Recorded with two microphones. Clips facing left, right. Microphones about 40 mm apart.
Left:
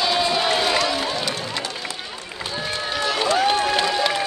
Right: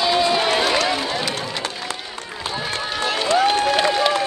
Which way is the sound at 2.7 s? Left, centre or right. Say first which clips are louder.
Even; right.